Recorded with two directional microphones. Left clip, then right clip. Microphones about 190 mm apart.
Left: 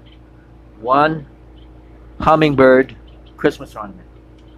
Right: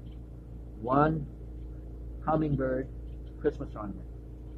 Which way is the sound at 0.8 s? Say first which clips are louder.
Left 12 dB; 10° left (ahead or behind).